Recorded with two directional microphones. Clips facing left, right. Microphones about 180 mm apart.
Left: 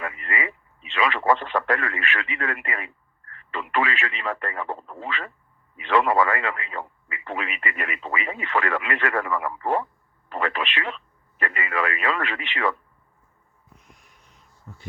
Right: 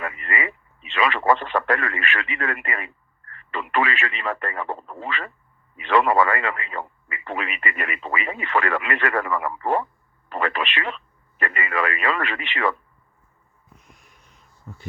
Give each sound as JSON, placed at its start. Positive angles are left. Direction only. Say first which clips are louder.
{"t": 0.0, "sound": "radio", "louder": "right 2 dB", "side_deg": -60}
{"t": 3.3, "sound": "speech", "louder": "right 2 dB", "side_deg": -60}